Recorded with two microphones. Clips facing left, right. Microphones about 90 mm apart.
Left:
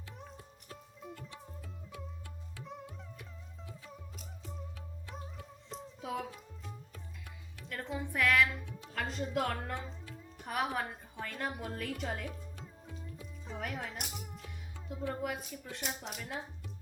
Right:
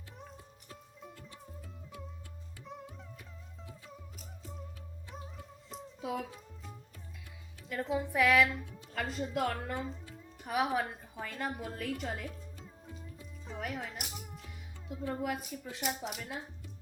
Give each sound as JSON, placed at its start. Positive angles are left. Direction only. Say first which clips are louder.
{"t": 0.2, "sound": "music", "louder": "even", "side_deg": 0}
{"t": 2.6, "sound": "music", "louder": "right 1 dB", "side_deg": 0}
{"t": 7.7, "sound": "a woman's voice", "louder": "right 5 dB", "side_deg": -5}